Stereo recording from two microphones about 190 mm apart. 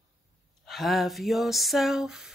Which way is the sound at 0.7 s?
Centre (ahead or behind).